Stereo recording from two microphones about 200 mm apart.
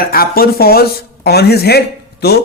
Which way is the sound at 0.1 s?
50° left (ahead or behind).